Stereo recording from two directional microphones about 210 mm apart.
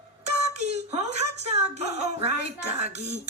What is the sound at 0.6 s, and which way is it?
Speech, 35° right (ahead or behind).